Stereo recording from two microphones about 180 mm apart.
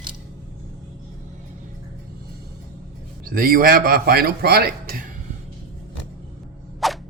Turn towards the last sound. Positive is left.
turn(degrees=0)  # may be behind; listen again after turning